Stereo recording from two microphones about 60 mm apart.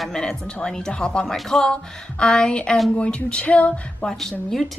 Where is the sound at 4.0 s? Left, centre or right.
Centre.